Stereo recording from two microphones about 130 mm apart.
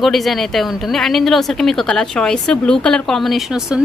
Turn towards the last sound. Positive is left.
turn(degrees=-5)  # may be behind; listen again after turning